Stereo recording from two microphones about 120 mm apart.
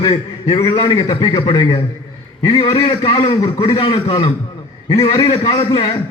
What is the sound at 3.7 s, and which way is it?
Speech, 50° left (ahead or behind).